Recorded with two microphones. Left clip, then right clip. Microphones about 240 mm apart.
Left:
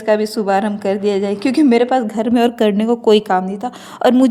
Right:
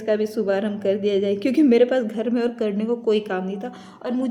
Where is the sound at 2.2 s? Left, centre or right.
Left.